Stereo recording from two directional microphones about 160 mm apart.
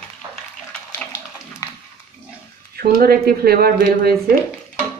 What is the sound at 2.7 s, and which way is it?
Speech, 75° right (ahead or behind).